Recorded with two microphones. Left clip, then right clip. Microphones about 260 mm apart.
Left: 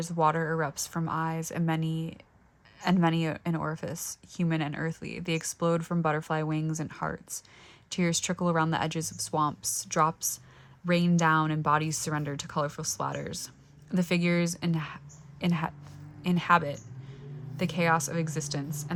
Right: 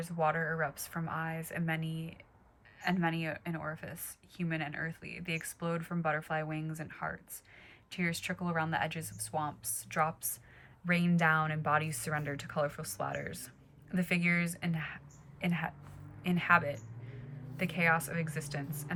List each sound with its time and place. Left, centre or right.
0.0 s speech: centre